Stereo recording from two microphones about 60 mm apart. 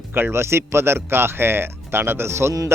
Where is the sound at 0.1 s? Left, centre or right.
Right.